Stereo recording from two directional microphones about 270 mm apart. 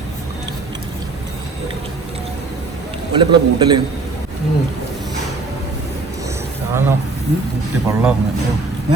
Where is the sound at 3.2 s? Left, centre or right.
Centre.